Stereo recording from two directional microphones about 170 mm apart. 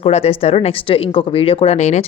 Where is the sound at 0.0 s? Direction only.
35° left (ahead or behind).